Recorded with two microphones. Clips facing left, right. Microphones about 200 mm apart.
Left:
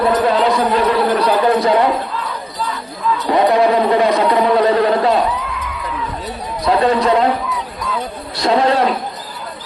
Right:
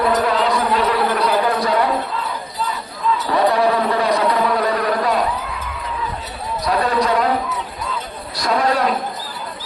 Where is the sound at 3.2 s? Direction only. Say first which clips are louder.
Left 4 dB; 20° left (ahead or behind).